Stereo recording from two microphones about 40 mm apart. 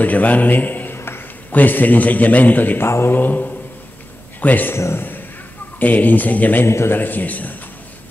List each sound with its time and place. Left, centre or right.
0.0 s a man's voice: left
0.9 s a sound: left
1.5 s a man's voice: left
2.8 s a man's voice: left
4.9 s a sound: left
5.8 s a man's voice: left
6.6 s a man's voice: left
7.0 s a man's voice: left